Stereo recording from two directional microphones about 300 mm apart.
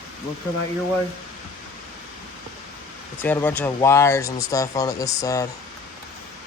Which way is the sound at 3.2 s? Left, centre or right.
Centre.